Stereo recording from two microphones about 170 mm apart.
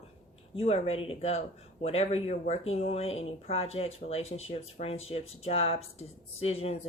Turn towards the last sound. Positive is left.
turn(degrees=35)  # may be behind; listen again after turning